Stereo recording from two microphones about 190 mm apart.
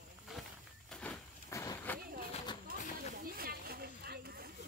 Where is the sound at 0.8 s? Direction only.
5° left (ahead or behind).